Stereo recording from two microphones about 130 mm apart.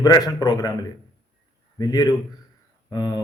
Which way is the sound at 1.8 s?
30° left (ahead or behind).